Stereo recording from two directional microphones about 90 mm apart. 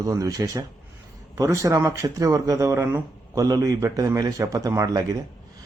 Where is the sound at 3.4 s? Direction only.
40° right (ahead or behind).